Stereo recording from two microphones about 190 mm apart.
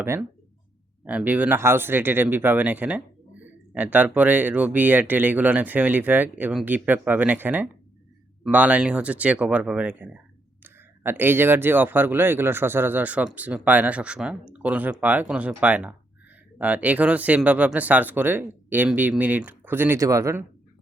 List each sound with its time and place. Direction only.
0.0 s speech: 10° right (ahead or behind)